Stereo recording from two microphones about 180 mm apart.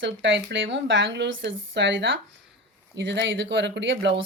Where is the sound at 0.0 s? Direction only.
85° right.